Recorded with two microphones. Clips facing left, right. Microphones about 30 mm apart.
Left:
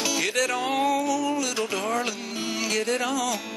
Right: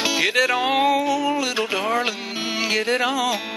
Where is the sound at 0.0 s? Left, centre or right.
Right.